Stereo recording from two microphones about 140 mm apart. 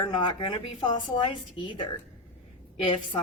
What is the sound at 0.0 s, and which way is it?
A woman's voice, 35° left (ahead or behind).